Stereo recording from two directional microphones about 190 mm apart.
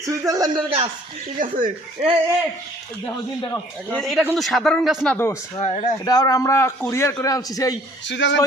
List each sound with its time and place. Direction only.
0.0 s speech: 15° right (ahead or behind)
1.4 s speech: 45° right (ahead or behind)
3.9 s a man's voice: centre (ahead or behind)
5.1 s a man's voice: 10° left (ahead or behind)
5.5 s speech: 35° left (ahead or behind)
6.1 s a man's voice: 20° left (ahead or behind)
8.0 s a man's voice: 70° left (ahead or behind)